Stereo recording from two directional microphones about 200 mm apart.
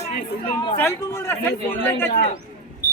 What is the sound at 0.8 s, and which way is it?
Speech, 10° left (ahead or behind).